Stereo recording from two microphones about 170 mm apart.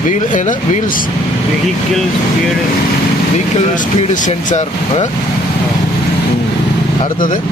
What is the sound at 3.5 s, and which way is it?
Speech, 50° left (ahead or behind).